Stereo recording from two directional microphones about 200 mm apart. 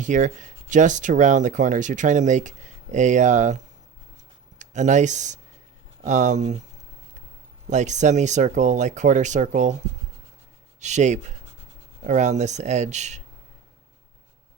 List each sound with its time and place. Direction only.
0.0 s speech: 40° right (ahead or behind)
7.7 s speech: 35° right (ahead or behind)
10.8 s speech: 35° right (ahead or behind)